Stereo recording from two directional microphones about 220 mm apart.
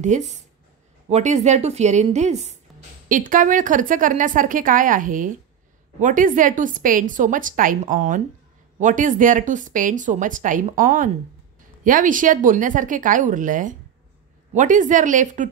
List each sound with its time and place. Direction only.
0.0 s speech: 30° right (ahead or behind)